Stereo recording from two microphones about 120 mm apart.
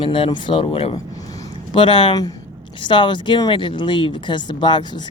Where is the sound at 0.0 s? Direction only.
50° left (ahead or behind).